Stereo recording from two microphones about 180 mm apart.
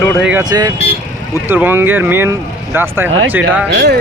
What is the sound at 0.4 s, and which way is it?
Speech, 20° right (ahead or behind).